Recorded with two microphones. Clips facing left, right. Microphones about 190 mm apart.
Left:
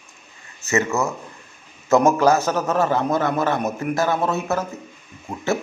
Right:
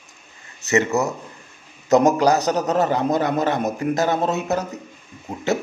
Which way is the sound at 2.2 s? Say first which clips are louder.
Even; 15° right (ahead or behind).